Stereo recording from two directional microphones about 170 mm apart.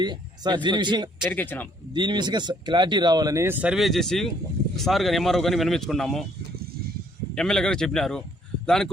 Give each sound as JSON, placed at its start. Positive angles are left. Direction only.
{"t": 0.0, "sound": "speech", "side_deg": -25}
{"t": 1.3, "sound": "speech", "side_deg": 10}
{"t": 1.9, "sound": "speech", "side_deg": -25}
{"t": 7.3, "sound": "speech", "side_deg": 5}